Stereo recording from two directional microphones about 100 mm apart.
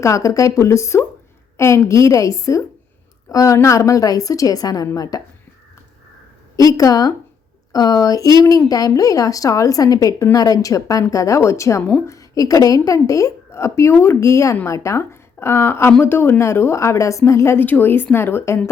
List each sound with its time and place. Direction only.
0.0 s a woman's voice: 30° left (ahead or behind)
6.6 s a woman's voice: 35° left (ahead or behind)
11.8 s a woman's voice: 20° left (ahead or behind)
12.0 s a woman's voice: 35° left (ahead or behind)